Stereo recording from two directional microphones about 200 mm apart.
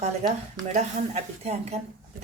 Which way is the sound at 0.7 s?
35° right (ahead or behind).